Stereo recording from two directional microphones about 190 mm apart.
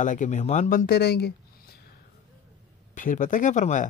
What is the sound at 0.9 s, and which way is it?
Speech, 60° left (ahead or behind).